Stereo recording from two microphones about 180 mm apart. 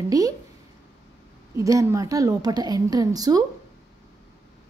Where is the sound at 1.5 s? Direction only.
20° right (ahead or behind).